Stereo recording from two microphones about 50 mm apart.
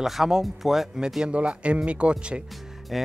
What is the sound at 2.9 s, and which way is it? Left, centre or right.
Speech, centre.